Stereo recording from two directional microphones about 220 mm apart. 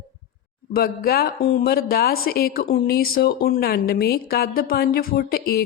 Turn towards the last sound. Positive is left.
turn(degrees=45)  # may be behind; listen again after turning